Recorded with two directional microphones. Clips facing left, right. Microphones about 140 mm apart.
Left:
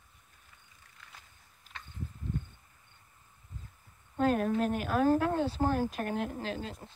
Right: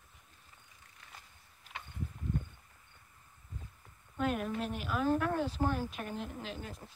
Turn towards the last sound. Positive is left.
turn(degrees=25)  # may be behind; listen again after turning